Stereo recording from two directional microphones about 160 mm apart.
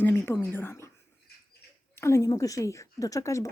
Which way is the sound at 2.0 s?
20° left (ahead or behind).